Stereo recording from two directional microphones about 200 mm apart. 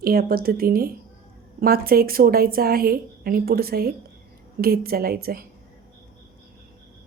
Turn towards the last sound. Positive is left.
turn(degrees=-50)  # may be behind; listen again after turning